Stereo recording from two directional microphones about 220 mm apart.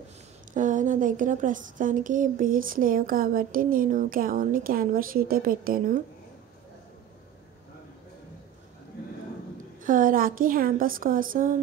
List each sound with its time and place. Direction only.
0.5 s a woman's voice: 35° right (ahead or behind)
9.8 s a woman's voice: 40° right (ahead or behind)